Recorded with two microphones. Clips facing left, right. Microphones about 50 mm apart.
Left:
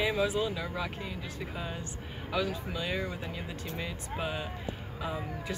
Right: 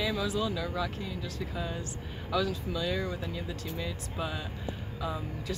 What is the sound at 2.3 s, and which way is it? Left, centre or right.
Speech, centre.